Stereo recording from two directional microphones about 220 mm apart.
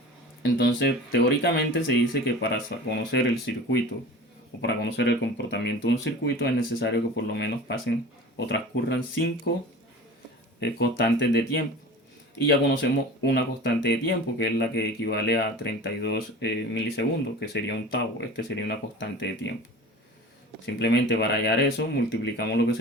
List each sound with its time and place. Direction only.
0.4 s speech: 55° left (ahead or behind)
10.6 s speech: 50° left (ahead or behind)
12.5 s speech: 50° left (ahead or behind)
20.7 s speech: 50° left (ahead or behind)